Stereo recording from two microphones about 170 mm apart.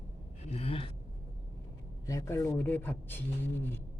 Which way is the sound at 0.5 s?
35° left (ahead or behind).